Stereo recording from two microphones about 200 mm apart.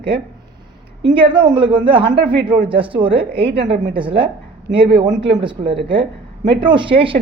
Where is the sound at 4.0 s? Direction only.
25° right (ahead or behind).